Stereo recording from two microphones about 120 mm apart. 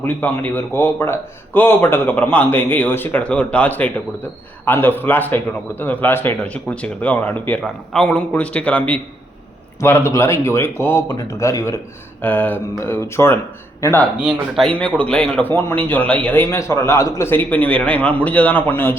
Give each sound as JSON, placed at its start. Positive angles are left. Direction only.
{"t": 0.0, "sound": "a man's voice", "side_deg": 15}
{"t": 12.2, "sound": "a man's voice", "side_deg": 15}
{"t": 14.5, "sound": "a man's voice", "side_deg": 5}